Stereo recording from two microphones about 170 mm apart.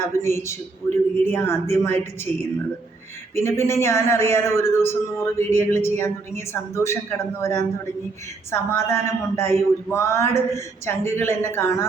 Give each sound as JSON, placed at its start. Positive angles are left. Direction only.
{"t": 0.0, "sound": "speech", "side_deg": 15}
{"t": 3.3, "sound": "speech", "side_deg": 15}